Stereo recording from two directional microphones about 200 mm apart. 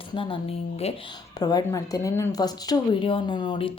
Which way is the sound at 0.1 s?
25° left (ahead or behind).